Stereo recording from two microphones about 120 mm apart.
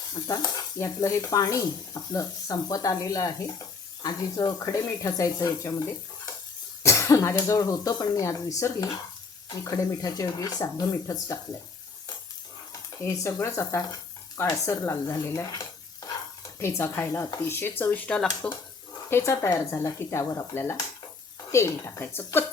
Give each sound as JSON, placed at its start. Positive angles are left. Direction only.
{"t": 0.1, "sound": "speech", "side_deg": 30}
{"t": 13.1, "sound": "speech", "side_deg": 25}
{"t": 19.1, "sound": "speech", "side_deg": 25}